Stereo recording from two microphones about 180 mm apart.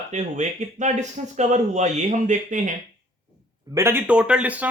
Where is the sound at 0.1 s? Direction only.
40° right (ahead or behind).